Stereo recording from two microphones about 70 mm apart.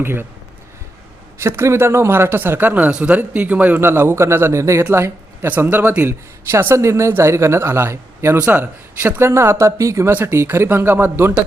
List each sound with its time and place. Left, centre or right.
0.0 s a man's voice: right
1.4 s a man's voice: right
5.5 s a man's voice: right
10.1 s a man's voice: right